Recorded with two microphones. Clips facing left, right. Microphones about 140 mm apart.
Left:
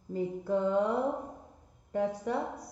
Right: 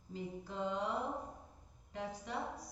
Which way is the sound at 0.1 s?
60° left (ahead or behind).